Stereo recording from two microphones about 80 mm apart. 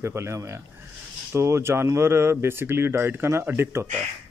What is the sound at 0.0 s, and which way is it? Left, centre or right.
Speech, right.